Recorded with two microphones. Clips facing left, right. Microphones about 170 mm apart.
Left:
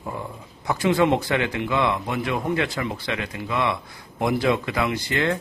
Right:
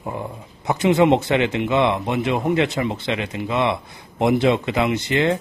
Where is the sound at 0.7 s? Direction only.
20° right (ahead or behind).